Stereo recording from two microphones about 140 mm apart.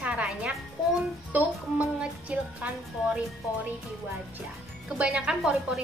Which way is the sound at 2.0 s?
10° right (ahead or behind).